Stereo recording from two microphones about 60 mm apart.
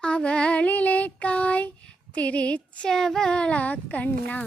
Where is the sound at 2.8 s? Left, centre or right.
Centre; by 4.1 s left.